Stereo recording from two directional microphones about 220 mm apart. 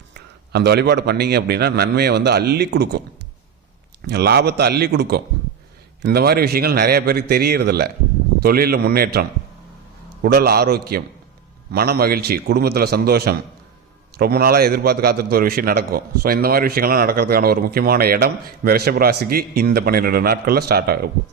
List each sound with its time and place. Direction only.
0.5 s a man's voice: 50° right (ahead or behind)
4.0 s a man's voice: 45° right (ahead or behind)
10.2 s a man's voice: 45° right (ahead or behind)